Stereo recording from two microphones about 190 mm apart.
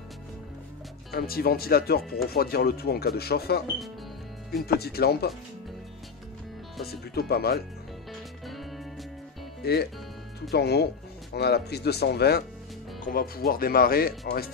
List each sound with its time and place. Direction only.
1.1 s speech: 55° left (ahead or behind)
4.6 s speech: 55° left (ahead or behind)
6.9 s speech: 55° left (ahead or behind)
8.1 s music: centre (ahead or behind)
9.6 s speech: 55° left (ahead or behind)